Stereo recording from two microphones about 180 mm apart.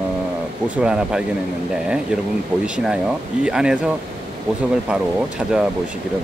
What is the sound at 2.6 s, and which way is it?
Speech, 5° right (ahead or behind).